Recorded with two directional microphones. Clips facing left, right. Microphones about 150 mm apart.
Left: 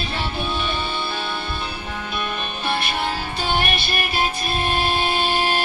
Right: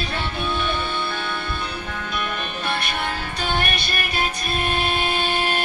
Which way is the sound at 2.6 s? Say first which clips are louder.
Left 3 dB; 25° left (ahead or behind).